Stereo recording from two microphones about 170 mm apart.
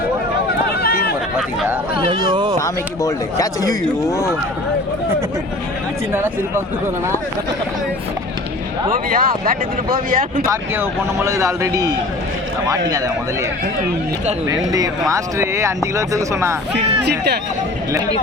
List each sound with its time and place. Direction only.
0.7 s chatter: 65° left (ahead or behind)
2.3 s speech: 30° right (ahead or behind)
2.6 s speech: 20° left (ahead or behind)
6.1 s speech: 15° right (ahead or behind)
8.9 s speech: 55° right (ahead or behind)
10.4 s speech: 15° right (ahead or behind)
14.4 s speech: 20° right (ahead or behind)
16.7 s speech: 80° right